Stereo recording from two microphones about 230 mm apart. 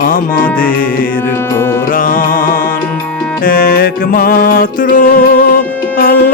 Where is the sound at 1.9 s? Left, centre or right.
Left.